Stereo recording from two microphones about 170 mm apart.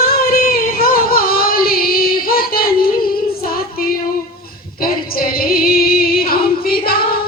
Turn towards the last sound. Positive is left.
turn(degrees=60)  # may be behind; listen again after turning